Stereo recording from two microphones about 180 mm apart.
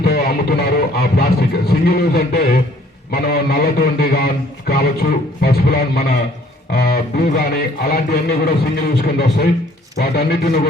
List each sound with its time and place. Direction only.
0.0 s speech: 60° left (ahead or behind)
5.4 s speech: 60° left (ahead or behind)